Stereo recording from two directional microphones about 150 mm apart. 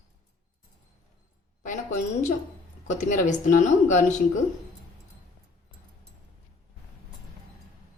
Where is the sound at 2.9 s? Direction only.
55° left (ahead or behind).